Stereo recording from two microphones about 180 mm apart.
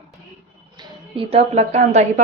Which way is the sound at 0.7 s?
30° right (ahead or behind).